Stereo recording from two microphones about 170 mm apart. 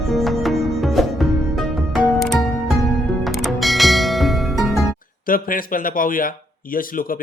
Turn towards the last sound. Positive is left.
turn(degrees=55)  # may be behind; listen again after turning